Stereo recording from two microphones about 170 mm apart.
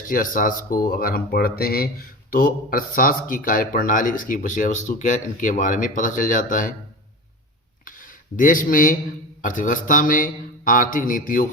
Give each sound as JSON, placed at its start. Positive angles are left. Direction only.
{"t": 0.1, "sound": "speech", "side_deg": 55}
{"t": 7.9, "sound": "a sound", "side_deg": 50}
{"t": 9.4, "sound": "speech", "side_deg": 50}